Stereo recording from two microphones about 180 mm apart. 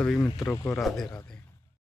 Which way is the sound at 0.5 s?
15° left (ahead or behind).